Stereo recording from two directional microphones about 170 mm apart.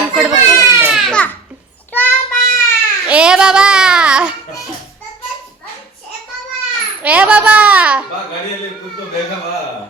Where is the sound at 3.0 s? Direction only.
5° right (ahead or behind).